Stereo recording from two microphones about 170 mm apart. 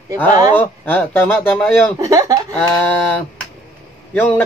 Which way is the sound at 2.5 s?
5° left (ahead or behind).